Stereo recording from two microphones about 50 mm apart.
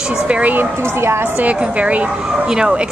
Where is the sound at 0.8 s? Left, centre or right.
Right.